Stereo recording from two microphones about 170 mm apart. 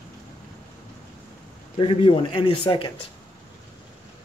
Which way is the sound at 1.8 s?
30° left (ahead or behind).